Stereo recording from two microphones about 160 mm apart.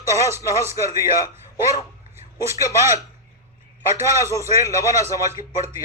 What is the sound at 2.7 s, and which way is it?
Speech, 20° right (ahead or behind).